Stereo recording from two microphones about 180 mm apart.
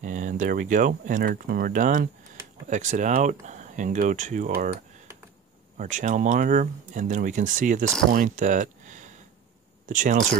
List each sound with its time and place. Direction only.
0.0 s speech: 45° right (ahead or behind)
5.8 s speech: 45° right (ahead or behind)